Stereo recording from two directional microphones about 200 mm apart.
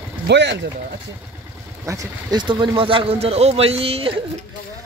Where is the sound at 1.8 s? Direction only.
20° right (ahead or behind).